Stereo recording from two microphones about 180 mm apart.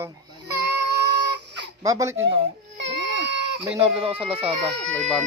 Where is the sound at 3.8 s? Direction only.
30° right (ahead or behind).